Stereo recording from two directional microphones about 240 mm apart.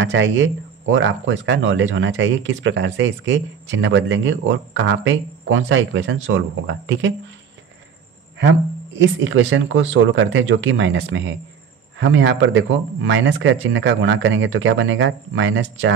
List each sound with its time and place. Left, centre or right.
0.0 s speech: right
8.4 s speech: right